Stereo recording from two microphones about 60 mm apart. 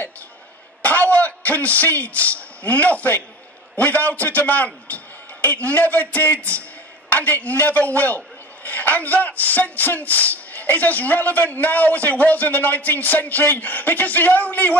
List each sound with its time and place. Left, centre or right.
0.8 s a man's voice: left